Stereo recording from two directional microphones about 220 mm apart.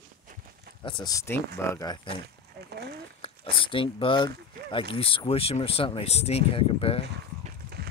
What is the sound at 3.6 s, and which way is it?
Speech, 25° left (ahead or behind).